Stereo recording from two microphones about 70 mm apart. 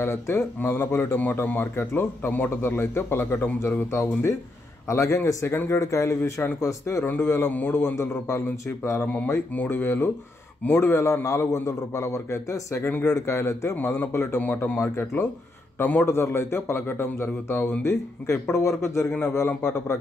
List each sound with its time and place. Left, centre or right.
0.0 s a man's voice: left
7.1 s a man's voice: left
7.9 s a man's voice: left
9.0 s a man's voice: left
11.2 s a man's voice: left
17.8 s a man's voice: left